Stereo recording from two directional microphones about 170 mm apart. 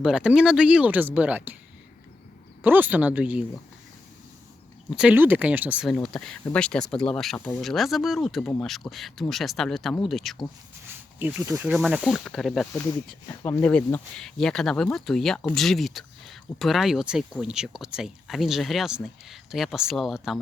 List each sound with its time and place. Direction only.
0.0 s speech: 5° right (ahead or behind)
2.6 s speech: 10° right (ahead or behind)
4.9 s speech: 5° right (ahead or behind)
13.2 s speech: 15° left (ahead or behind)